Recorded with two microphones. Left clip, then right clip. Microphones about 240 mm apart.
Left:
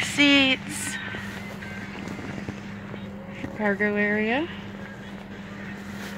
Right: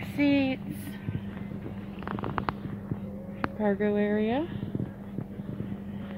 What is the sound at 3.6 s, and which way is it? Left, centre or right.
Speech, left.